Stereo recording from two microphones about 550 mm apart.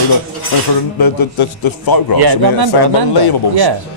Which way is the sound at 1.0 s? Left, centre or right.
Left.